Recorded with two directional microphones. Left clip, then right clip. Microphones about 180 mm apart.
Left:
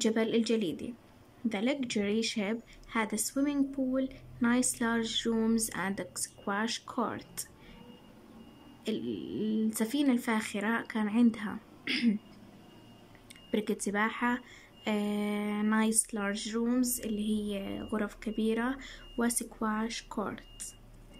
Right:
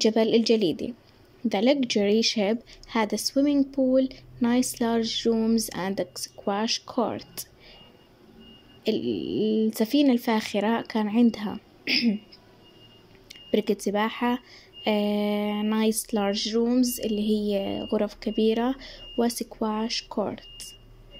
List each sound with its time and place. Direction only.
0.0 s a woman's voice: 15° right (ahead or behind)
8.8 s a woman's voice: 15° right (ahead or behind)
11.8 s speech: 5° right (ahead or behind)
13.3 s a woman's voice: 15° right (ahead or behind)